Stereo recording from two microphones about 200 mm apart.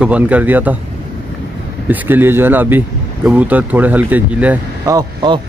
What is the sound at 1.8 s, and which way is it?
Speech, 10° right (ahead or behind).